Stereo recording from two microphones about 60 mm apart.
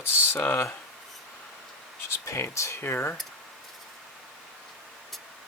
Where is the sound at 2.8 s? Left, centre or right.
Left.